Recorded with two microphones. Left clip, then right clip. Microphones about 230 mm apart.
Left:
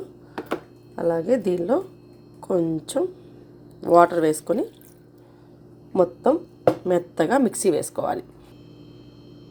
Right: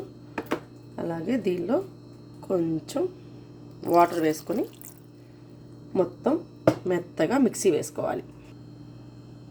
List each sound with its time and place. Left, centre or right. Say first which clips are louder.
0.3 s a sound: left 1 dB; centre
1.3 s speech: left 1 dB; centre
5.9 s speech: left 6 dB; centre